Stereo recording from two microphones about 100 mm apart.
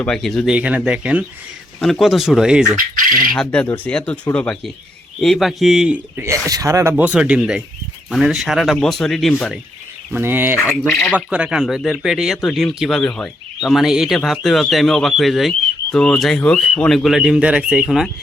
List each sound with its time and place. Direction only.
0.0 s speech: 5° left (ahead or behind)
0.5 s speech: 15° right (ahead or behind)
3.2 s speech: 10° left (ahead or behind)
5.2 s speech: centre (ahead or behind)
6.1 s speech: 30° right (ahead or behind)
6.9 s speech: 10° right (ahead or behind)
10.1 s speech: 20° right (ahead or behind); by 18.1 s 5° right (ahead or behind)